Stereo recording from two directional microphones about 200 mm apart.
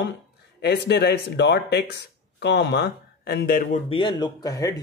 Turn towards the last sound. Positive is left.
turn(degrees=15)  # may be behind; listen again after turning